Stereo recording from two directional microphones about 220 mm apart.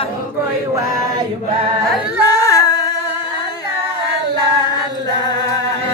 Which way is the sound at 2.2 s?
15° left (ahead or behind).